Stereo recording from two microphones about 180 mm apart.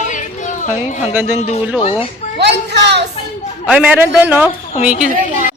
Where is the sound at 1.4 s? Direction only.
40° left (ahead or behind).